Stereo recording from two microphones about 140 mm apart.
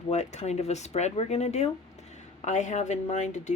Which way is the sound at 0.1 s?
55° left (ahead or behind).